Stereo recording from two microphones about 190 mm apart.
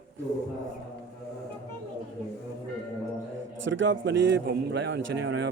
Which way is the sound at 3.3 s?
80° right.